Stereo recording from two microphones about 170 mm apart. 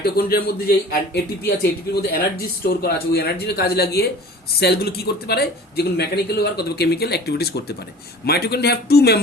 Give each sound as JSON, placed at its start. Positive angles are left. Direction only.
{"t": 0.0, "sound": "a man's voice", "side_deg": 65}